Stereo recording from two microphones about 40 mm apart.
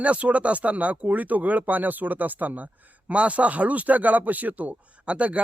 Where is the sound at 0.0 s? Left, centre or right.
Right.